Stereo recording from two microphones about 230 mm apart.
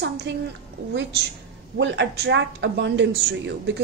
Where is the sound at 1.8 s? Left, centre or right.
Right.